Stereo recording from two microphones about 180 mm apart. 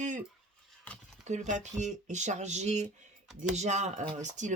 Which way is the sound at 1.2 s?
40° right (ahead or behind).